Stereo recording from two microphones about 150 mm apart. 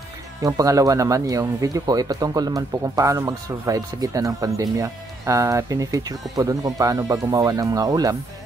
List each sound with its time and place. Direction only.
0.4 s speech: 20° right (ahead or behind)